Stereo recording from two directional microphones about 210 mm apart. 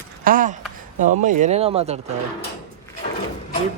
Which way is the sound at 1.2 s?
35° right (ahead or behind).